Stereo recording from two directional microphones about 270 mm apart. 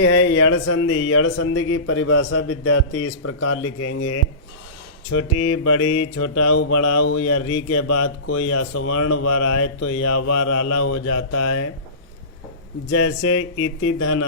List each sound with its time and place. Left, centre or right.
0.0 s speech: left
5.1 s mantra: left
12.9 s speech: left